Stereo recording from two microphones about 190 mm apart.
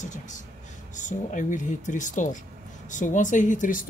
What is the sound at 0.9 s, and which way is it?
Speech, 40° left (ahead or behind).